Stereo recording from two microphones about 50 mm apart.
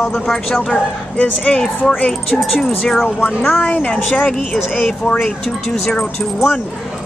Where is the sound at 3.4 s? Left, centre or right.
Left.